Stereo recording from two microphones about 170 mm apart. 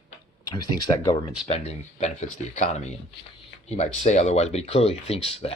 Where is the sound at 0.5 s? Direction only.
25° left (ahead or behind).